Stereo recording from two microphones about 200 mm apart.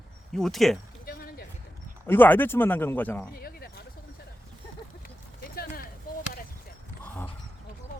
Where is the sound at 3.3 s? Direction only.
50° left (ahead or behind).